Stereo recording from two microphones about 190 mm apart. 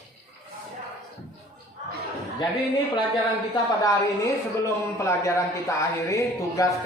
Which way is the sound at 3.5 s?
15° left (ahead or behind).